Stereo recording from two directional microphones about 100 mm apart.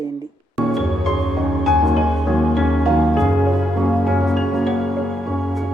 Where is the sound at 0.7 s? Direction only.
Centre (ahead or behind).